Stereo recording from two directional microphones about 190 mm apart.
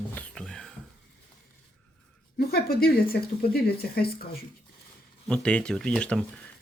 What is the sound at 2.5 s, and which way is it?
Speech, 55° left (ahead or behind).